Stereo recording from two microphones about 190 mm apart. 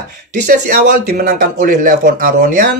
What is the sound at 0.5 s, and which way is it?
A man's voice, 50° right (ahead or behind).